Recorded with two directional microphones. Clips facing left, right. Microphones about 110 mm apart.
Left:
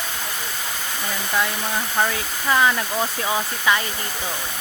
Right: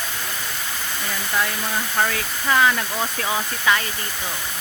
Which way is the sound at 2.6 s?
15° left (ahead or behind).